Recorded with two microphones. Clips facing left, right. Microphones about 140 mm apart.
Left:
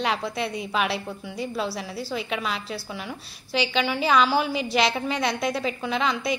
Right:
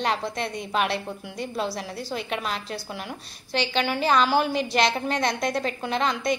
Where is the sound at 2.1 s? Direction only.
45° right (ahead or behind).